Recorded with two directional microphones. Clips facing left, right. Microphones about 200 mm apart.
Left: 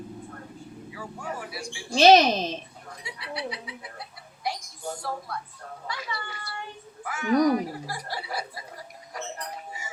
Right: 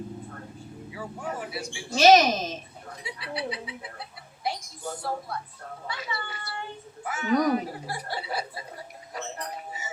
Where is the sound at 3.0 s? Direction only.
25° right (ahead or behind).